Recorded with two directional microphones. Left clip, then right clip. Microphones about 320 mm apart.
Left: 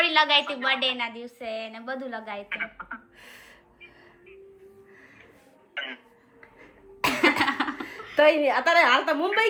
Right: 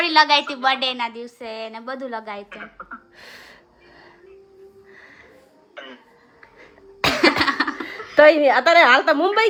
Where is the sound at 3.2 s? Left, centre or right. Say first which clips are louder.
Right 6 dB; right.